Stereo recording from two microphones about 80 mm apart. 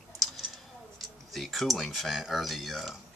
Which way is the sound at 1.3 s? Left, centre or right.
Centre.